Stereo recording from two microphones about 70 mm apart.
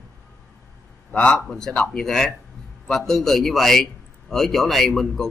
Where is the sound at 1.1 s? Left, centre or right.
Left.